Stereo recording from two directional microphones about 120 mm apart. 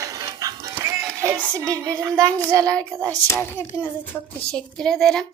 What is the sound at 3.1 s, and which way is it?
A woman's voice, 15° left (ahead or behind).